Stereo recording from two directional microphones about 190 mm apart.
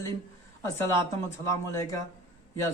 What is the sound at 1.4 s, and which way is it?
Speech, 15° left (ahead or behind).